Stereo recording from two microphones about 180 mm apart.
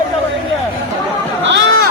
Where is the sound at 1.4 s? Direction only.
90° right.